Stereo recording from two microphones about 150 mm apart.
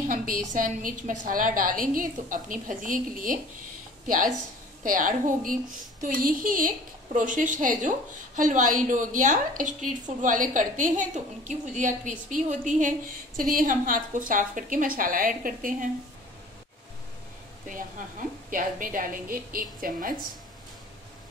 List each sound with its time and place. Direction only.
0.1 s a woman's voice: 65° right (ahead or behind)
4.8 s a woman's voice: 65° right (ahead or behind)
18.5 s a woman's voice: 65° right (ahead or behind)